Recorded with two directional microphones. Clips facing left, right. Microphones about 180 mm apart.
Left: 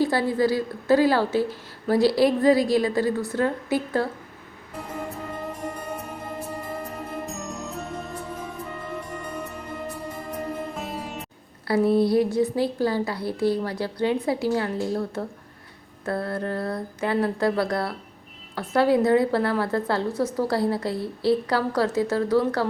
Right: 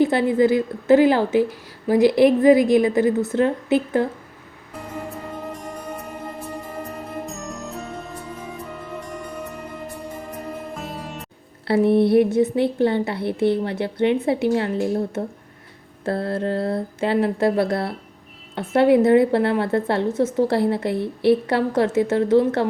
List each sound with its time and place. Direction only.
0.0 s a woman's voice: 20° right (ahead or behind)
10.8 s music: centre (ahead or behind)
11.7 s a woman's voice: 25° right (ahead or behind)